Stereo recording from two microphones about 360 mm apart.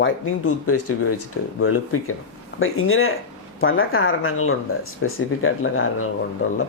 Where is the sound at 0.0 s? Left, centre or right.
Left.